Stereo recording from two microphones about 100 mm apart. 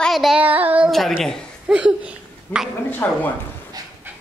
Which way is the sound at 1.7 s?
10° right (ahead or behind).